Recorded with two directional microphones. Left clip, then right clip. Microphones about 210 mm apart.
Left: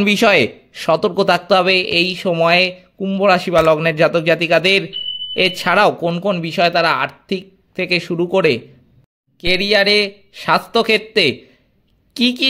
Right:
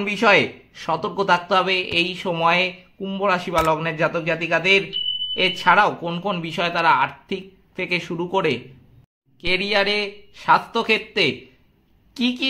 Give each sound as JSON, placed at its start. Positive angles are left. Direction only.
{"t": 0.0, "sound": "a man's voice", "side_deg": 45}